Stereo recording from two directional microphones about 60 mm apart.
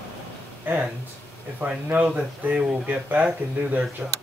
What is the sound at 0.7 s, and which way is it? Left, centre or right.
Speech, right.